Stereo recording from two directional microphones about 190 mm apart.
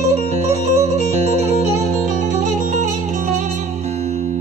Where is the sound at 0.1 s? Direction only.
35° right (ahead or behind).